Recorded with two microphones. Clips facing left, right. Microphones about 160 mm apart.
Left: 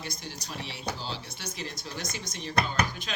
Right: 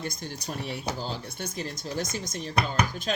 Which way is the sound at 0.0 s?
50° right (ahead or behind).